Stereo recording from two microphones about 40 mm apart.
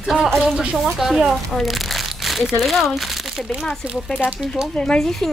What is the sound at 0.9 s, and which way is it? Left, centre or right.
Speech, centre.